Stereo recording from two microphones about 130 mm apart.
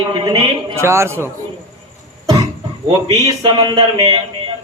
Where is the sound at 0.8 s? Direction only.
20° right (ahead or behind).